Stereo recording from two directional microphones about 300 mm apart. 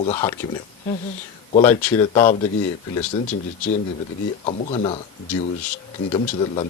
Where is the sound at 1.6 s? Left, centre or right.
Centre.